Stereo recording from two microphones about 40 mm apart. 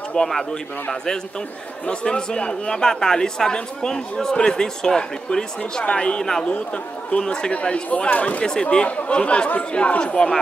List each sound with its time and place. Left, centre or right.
0.2 s speech: centre
1.9 s speech: left